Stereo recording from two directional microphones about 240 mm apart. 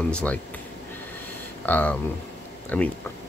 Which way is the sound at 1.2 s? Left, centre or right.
Centre.